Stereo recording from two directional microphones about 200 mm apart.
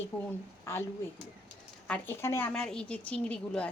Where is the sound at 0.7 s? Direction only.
10° left (ahead or behind).